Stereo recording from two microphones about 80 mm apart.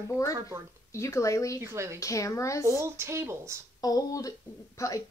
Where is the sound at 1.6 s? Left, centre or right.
Right.